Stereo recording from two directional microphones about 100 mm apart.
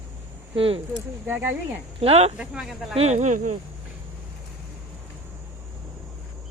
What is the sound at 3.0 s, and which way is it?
Speech, 90° right.